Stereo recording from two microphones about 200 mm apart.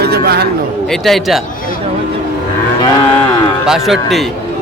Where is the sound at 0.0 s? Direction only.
50° right (ahead or behind).